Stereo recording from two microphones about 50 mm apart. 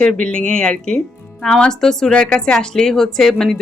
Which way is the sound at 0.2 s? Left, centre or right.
Left.